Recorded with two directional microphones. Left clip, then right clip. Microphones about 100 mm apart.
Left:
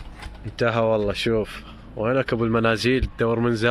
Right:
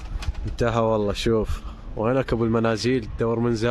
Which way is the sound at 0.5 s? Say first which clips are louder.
Left 1 dB; 45° right (ahead or behind).